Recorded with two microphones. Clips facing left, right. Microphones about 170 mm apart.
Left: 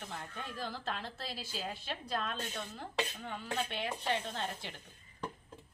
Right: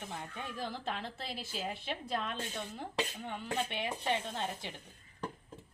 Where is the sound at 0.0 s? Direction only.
10° right (ahead or behind).